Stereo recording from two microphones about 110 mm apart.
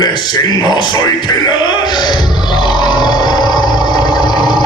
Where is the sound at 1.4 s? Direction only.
45° left (ahead or behind).